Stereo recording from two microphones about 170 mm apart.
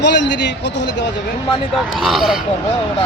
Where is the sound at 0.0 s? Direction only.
90° left.